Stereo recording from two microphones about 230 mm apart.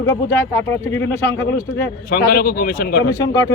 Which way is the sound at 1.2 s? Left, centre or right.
Left.